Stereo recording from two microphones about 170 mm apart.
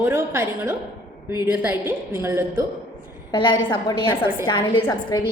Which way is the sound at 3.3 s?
30° left (ahead or behind).